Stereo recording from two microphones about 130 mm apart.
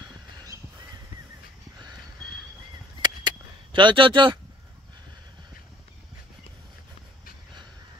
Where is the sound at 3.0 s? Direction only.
35° right (ahead or behind).